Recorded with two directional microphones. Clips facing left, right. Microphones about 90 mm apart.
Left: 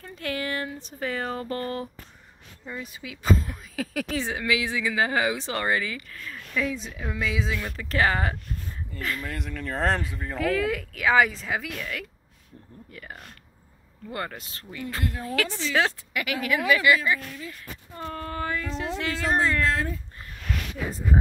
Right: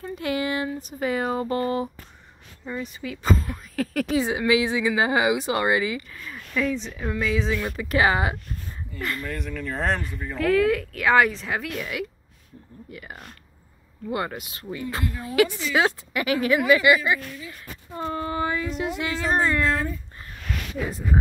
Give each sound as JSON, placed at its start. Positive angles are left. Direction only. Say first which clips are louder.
{"t": 0.0, "sound": "speech", "louder": "right 5 dB", "side_deg": -15}
{"t": 0.7, "sound": "speech", "louder": "right 5 dB", "side_deg": -5}
{"t": 4.1, "sound": "speech", "louder": "right 7 dB", "side_deg": -15}
{"t": 6.6, "sound": "speech", "louder": "right 4 dB", "side_deg": 5}
{"t": 7.6, "sound": "speech", "louder": "right 2 dB", "side_deg": -10}
{"t": 11.8, "sound": "speech", "louder": "right 4 dB", "side_deg": -10}
{"t": 16.1, "sound": "speech", "louder": "right 5 dB", "side_deg": -30}